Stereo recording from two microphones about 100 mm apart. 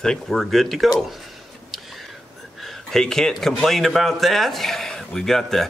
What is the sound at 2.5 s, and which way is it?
A man's voice, centre (ahead or behind).